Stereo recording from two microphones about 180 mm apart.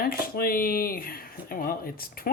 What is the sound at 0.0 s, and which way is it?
Speech, 55° left (ahead or behind).